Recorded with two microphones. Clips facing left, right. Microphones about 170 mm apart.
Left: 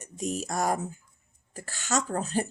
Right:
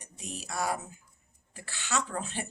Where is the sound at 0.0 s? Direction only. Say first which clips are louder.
Left 11 dB; 45° left (ahead or behind).